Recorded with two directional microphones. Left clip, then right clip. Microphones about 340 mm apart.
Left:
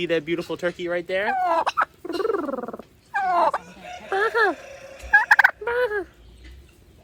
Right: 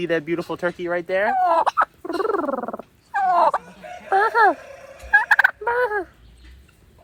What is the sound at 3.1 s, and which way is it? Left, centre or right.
Dog, centre.